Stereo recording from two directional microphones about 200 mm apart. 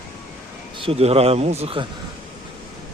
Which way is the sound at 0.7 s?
30° right (ahead or behind).